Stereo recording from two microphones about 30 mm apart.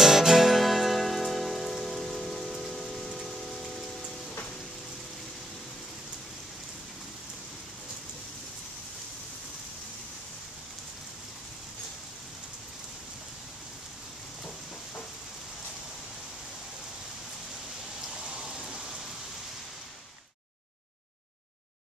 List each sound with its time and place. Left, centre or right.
0.0 s music: centre
2.6 s a sound: centre
18.2 s rain: right